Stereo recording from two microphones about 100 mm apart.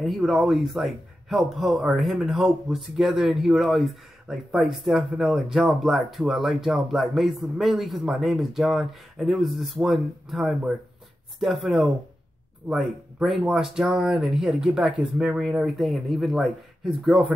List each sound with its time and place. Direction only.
0.0 s speech: centre (ahead or behind)